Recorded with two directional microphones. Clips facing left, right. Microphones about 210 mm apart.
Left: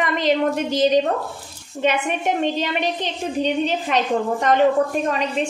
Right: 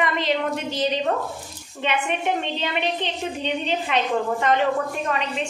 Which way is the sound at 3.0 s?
40° left (ahead or behind).